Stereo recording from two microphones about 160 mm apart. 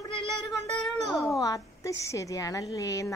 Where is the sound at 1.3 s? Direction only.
20° left (ahead or behind).